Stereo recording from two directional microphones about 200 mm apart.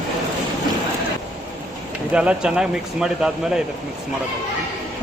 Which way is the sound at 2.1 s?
5° right (ahead or behind).